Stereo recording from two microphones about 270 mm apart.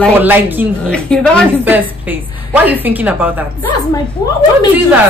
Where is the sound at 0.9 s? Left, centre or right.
Centre.